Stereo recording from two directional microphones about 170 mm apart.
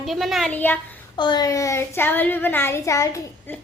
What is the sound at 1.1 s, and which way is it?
Child singing, 25° left (ahead or behind).